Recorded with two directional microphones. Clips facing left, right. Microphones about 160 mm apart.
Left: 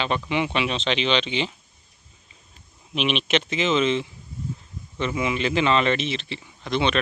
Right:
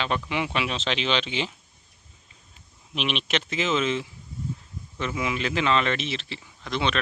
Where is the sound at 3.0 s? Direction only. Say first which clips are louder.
Left 5 dB; centre (ahead or behind).